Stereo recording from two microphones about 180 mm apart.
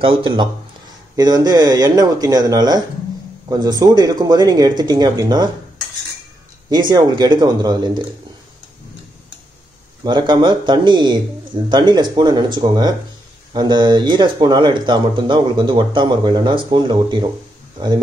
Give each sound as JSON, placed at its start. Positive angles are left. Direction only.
{"t": 0.0, "sound": "speech", "side_deg": -30}
{"t": 6.7, "sound": "speech", "side_deg": -25}
{"t": 10.0, "sound": "speech", "side_deg": -25}